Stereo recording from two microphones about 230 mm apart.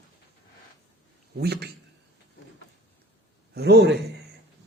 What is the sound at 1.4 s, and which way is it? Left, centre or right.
Speech, right.